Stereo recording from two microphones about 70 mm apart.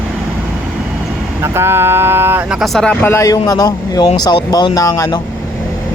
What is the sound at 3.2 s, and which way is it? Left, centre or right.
Speech, left.